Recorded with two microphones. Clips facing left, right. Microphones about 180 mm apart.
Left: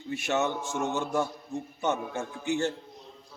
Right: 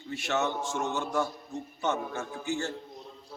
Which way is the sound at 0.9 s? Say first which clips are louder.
Left 1 dB; 10° left (ahead or behind).